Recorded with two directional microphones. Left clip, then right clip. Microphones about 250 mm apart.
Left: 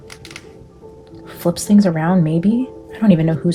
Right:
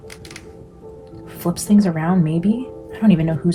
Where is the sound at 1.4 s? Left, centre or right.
Left.